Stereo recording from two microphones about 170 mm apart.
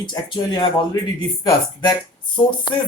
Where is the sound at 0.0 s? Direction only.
25° left (ahead or behind).